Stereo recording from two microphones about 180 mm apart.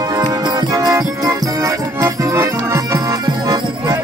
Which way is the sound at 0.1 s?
20° right (ahead or behind).